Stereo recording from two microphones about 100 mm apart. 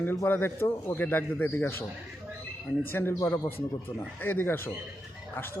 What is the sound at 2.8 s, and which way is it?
A man's voice, 25° left (ahead or behind).